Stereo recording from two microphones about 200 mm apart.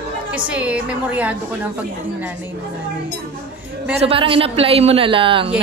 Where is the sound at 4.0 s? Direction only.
25° right (ahead or behind).